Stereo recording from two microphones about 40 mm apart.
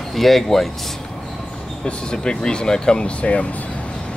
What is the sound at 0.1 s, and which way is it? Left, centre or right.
Speech, centre.